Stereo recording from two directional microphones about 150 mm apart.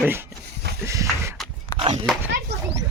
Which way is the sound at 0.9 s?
20° right (ahead or behind).